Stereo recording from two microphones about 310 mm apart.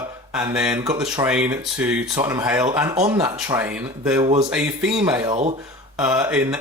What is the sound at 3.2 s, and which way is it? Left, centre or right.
Speech, centre.